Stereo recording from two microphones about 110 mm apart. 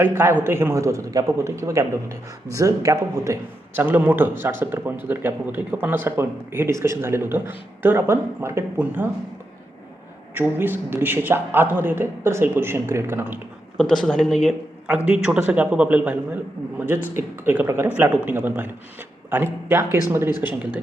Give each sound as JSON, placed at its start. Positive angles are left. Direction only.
{"t": 0.0, "sound": "speech", "side_deg": -20}
{"t": 3.8, "sound": "speech", "side_deg": -20}
{"t": 10.3, "sound": "speech", "side_deg": -15}
{"t": 13.7, "sound": "speech", "side_deg": 5}
{"t": 14.8, "sound": "a man's voice", "side_deg": -15}